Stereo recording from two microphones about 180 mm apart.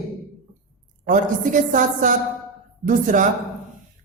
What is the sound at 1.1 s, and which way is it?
Speech, 45° right (ahead or behind).